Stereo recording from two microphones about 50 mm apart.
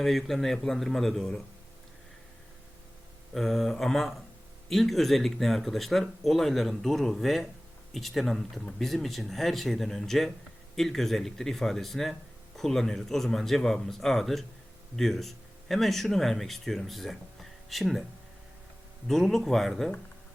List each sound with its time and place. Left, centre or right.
0.0 s speech: centre
3.3 s speech: centre
19.0 s speech: centre